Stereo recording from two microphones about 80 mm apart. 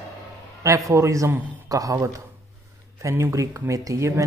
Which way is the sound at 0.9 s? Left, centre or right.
Right.